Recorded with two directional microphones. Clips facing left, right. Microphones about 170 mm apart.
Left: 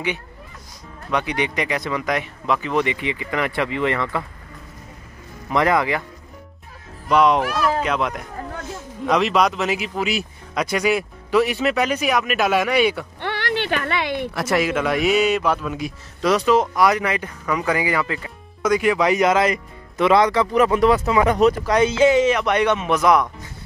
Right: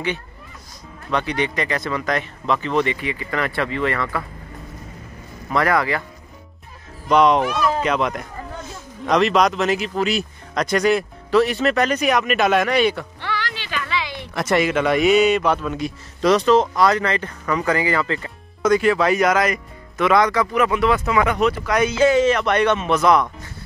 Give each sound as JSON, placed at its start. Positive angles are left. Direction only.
{"t": 1.1, "sound": "speech", "side_deg": 15}
{"t": 5.5, "sound": "speech", "side_deg": 20}
{"t": 7.1, "sound": "speech", "side_deg": 5}
{"t": 13.2, "sound": "a sound", "side_deg": 55}
{"t": 14.3, "sound": "speech", "side_deg": 5}
{"t": 21.6, "sound": "speech", "side_deg": 25}